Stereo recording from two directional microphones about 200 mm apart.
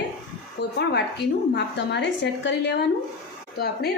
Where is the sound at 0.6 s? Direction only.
60° left (ahead or behind).